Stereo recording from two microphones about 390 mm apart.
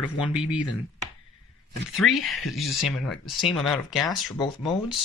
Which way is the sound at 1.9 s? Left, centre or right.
Centre.